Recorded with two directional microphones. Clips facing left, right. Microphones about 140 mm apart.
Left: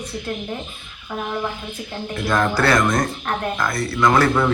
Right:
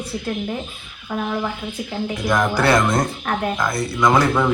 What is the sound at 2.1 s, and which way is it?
Speech, 15° right (ahead or behind).